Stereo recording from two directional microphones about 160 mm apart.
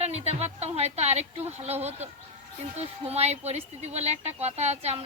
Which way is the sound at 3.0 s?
40° right (ahead or behind).